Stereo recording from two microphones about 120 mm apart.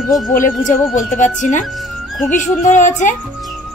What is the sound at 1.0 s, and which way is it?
Speech, 90° left.